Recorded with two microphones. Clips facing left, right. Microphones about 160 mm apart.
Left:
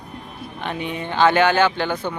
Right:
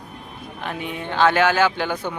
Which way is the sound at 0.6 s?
Centre (ahead or behind).